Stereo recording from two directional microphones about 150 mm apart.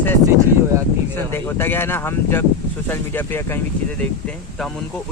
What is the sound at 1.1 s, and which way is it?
A man's voice, 15° left (ahead or behind).